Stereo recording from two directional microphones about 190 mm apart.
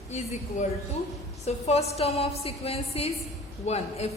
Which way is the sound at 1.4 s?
35° left (ahead or behind).